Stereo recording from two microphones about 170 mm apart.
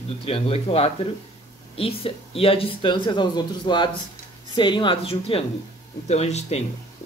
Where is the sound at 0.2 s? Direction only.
35° left (ahead or behind).